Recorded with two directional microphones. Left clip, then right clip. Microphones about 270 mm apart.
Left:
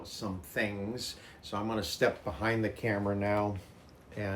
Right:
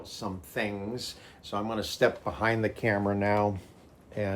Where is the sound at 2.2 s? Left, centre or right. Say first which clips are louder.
Right 4 dB; right.